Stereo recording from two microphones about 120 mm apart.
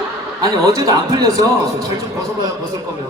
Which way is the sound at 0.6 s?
30° right (ahead or behind).